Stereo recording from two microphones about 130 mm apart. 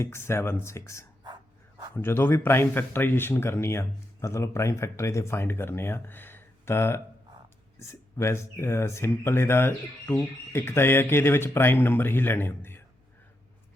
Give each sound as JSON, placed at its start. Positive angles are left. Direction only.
{"t": 0.0, "sound": "speech", "side_deg": 20}